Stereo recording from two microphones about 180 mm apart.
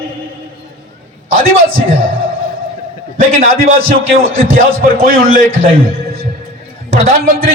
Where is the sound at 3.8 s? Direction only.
90° right.